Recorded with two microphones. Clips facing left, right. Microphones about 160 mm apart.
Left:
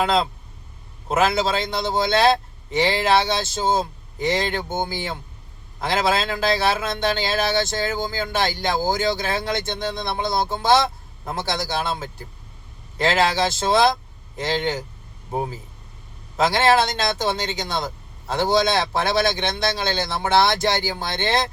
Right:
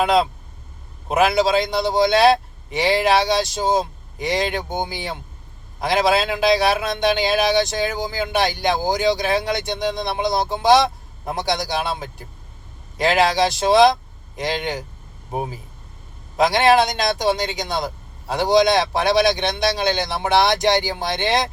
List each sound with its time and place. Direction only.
0.0 s speech: 15° right (ahead or behind)